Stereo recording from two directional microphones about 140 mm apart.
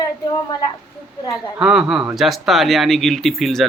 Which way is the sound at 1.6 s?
5° right (ahead or behind).